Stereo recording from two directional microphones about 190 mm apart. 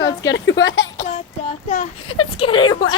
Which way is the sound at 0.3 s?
70° left (ahead or behind).